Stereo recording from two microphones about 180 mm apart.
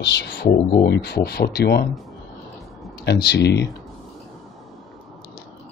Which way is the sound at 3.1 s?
65° left (ahead or behind).